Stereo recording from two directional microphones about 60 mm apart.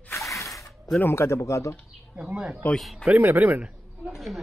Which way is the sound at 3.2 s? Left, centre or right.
Right.